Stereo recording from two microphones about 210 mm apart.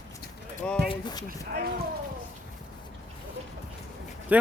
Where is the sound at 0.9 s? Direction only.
20° left (ahead or behind).